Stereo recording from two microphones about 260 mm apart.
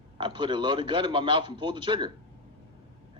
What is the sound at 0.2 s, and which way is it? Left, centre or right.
A man's voice, centre.